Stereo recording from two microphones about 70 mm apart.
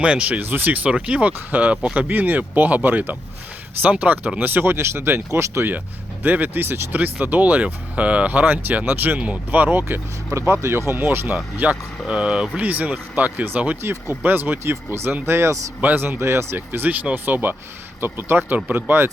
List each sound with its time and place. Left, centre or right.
0.0 s speech: centre; by 5.6 s right
6.2 s speech: right
10.3 s speech: right
11.5 s speech: right